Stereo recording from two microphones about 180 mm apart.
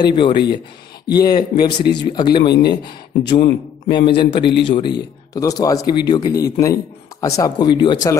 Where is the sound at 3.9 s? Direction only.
25° left (ahead or behind).